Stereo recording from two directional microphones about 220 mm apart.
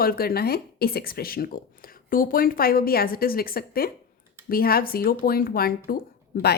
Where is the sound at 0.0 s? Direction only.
45° left (ahead or behind).